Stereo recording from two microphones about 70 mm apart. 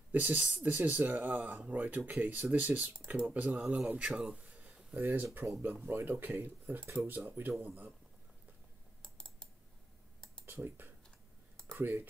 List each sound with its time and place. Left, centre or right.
0.1 s speech: right
4.9 s speech: right
9.0 s typing: centre
10.4 s speech: right